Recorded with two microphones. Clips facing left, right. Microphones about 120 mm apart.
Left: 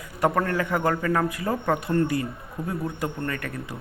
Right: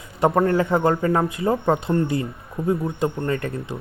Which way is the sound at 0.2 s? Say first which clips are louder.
Right 5 dB; 25° right (ahead or behind).